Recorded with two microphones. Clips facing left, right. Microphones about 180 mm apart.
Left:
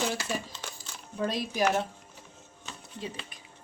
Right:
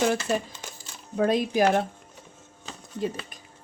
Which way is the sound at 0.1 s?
55° right (ahead or behind).